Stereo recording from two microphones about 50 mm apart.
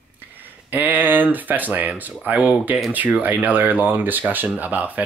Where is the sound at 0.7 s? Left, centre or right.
Right.